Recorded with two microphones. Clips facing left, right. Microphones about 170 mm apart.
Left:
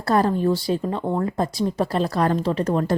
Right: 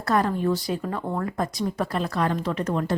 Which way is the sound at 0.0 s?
30° left (ahead or behind).